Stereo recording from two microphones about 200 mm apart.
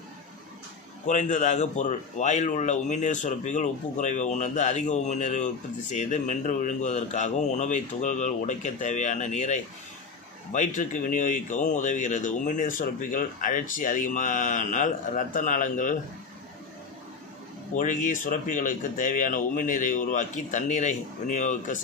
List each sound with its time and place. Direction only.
1.0 s speech: 35° left (ahead or behind)
17.7 s speech: 40° left (ahead or behind)